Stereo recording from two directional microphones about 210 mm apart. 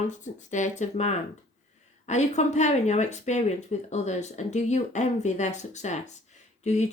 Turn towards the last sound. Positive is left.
turn(degrees=30)  # may be behind; listen again after turning